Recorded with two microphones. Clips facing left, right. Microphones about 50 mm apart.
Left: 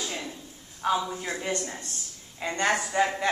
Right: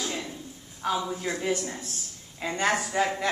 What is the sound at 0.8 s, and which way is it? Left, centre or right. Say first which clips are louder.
A woman's voice: left 1 dB; centre.